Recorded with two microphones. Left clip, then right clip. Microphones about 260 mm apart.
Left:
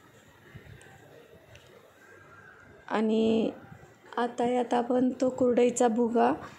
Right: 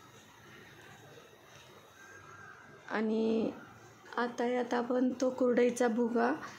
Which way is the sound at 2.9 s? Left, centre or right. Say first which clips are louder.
Left 6 dB; centre.